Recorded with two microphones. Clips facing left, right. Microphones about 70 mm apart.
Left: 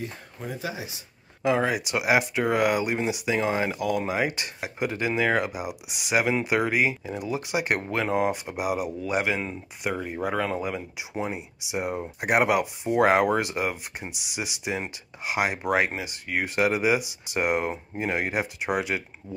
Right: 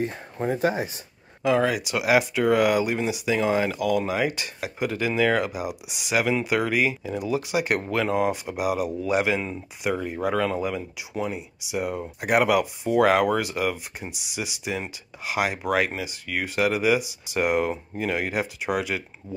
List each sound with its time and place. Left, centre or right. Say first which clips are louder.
0.0 s speech: right 8 dB; right
1.4 s speech: right 2 dB; centre
1.8 s speech: right 2 dB; centre
6.9 s speech: right 3 dB; centre
11.0 s speech: right 1 dB; left
14.0 s speech: right 1 dB; centre